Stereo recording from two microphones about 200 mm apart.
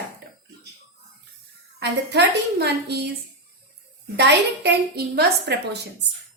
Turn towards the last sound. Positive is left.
turn(degrees=-55)  # may be behind; listen again after turning